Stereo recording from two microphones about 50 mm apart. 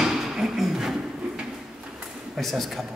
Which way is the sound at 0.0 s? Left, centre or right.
Centre.